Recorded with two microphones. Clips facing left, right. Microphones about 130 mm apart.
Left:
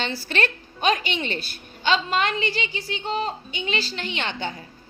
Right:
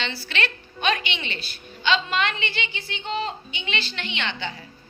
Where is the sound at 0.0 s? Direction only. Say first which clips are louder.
Left 3 dB; 50° left (ahead or behind).